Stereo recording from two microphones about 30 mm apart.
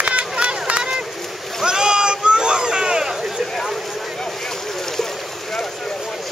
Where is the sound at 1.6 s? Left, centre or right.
Right.